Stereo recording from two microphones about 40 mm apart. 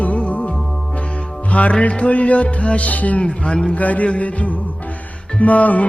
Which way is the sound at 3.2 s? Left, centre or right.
Left.